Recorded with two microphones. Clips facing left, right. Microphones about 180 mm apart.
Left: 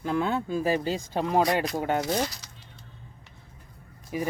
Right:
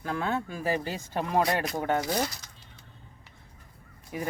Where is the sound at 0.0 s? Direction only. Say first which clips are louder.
Left 4 dB; 20° left (ahead or behind).